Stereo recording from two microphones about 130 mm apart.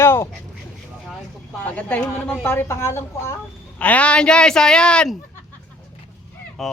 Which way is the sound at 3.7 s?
10° left (ahead or behind).